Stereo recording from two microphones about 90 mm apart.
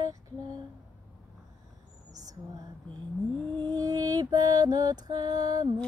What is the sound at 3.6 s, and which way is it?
Mantra, 45° right (ahead or behind).